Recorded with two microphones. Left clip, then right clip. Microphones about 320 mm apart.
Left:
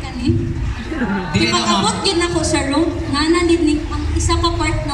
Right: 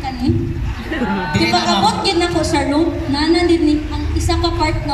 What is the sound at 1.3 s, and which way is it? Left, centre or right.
A man's voice, centre.